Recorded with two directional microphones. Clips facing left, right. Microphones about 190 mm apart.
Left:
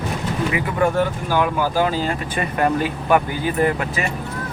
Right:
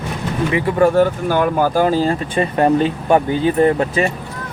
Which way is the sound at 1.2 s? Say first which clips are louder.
Right 4 dB; 50° right (ahead or behind).